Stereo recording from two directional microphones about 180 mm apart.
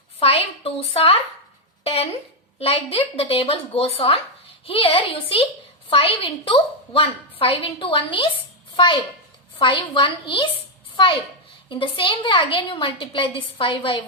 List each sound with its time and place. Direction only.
0.2 s a woman's voice: 30° left (ahead or behind)
11.7 s a woman's voice: 30° left (ahead or behind)